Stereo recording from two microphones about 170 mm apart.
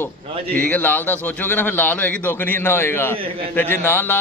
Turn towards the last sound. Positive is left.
turn(degrees=10)  # may be behind; listen again after turning